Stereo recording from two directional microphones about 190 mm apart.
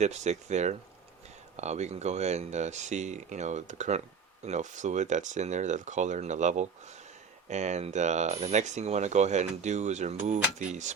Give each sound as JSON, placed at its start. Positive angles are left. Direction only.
{"t": 0.0, "sound": "speech", "side_deg": -35}